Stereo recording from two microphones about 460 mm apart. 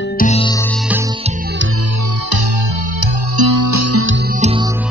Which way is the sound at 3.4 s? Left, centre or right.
Right.